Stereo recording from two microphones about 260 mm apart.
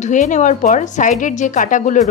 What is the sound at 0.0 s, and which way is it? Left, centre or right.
A woman's voice, left.